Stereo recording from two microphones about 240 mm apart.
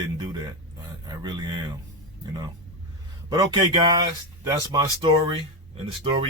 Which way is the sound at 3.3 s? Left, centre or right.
Centre.